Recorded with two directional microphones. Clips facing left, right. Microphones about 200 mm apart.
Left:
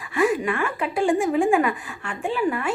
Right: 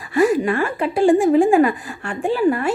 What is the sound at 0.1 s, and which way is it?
A woman's voice, 35° right (ahead or behind).